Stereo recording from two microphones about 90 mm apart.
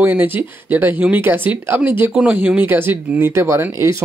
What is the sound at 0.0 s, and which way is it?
Speech, 20° right (ahead or behind).